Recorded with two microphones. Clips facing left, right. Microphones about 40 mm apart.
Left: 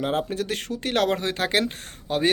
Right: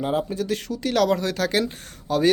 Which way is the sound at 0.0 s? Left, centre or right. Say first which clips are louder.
Right 1 dB; left.